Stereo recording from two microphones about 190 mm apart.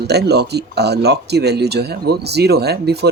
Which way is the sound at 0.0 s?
60° right (ahead or behind).